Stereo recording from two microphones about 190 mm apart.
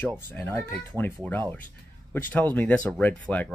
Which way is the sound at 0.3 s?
10° left (ahead or behind).